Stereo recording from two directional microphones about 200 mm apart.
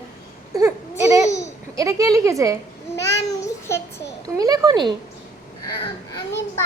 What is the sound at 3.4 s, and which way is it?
Child singing, 15° left (ahead or behind).